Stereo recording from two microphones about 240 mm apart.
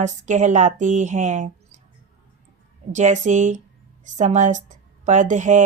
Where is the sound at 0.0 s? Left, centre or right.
Right.